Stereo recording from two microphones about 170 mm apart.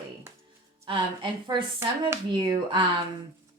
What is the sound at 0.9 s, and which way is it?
Speech, 30° right (ahead or behind).